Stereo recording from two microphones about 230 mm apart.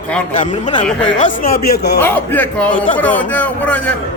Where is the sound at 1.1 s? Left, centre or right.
Left.